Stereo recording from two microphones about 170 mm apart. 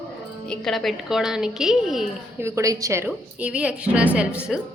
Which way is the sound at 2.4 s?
15° right (ahead or behind).